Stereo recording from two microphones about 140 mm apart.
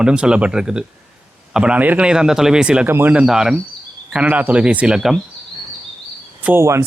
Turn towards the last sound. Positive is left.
turn(degrees=-20)  # may be behind; listen again after turning